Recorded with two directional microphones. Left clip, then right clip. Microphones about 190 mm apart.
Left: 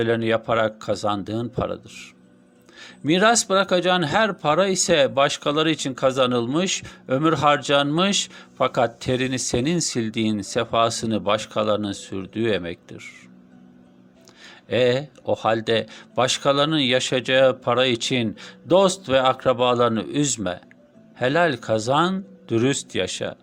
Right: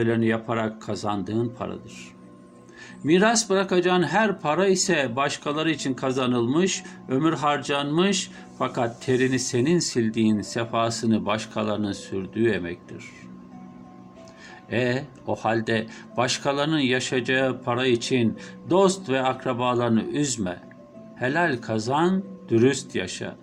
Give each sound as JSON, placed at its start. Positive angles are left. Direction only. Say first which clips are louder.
{"t": 0.0, "sound": "speech", "louder": "left 3 dB", "side_deg": 40}
{"t": 14.7, "sound": "speech", "louder": "left 6 dB", "side_deg": 35}